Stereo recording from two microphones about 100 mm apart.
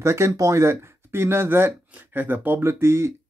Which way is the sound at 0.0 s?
30° right (ahead or behind).